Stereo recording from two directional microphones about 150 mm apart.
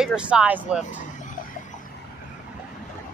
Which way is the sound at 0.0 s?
5° right (ahead or behind).